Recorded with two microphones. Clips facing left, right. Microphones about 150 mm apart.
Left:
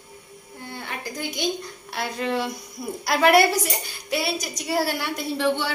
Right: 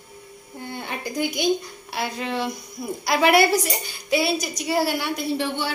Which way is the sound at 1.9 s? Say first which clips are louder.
Left 1 dB; centre (ahead or behind).